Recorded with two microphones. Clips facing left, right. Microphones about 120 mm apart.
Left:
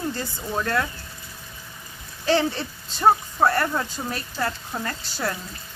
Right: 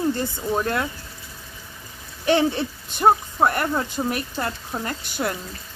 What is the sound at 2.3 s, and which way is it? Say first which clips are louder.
Speech: right 2 dB; 15° right (ahead or behind).